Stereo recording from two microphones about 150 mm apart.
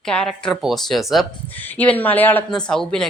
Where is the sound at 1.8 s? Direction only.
10° left (ahead or behind).